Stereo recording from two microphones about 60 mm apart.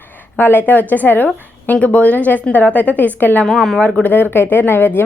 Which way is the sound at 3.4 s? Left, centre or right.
Centre.